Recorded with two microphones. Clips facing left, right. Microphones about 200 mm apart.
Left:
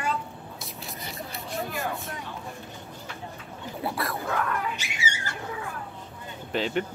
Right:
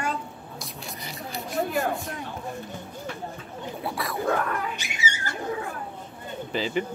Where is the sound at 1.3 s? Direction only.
Centre (ahead or behind).